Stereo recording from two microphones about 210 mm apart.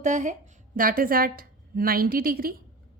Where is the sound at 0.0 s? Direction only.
35° right (ahead or behind).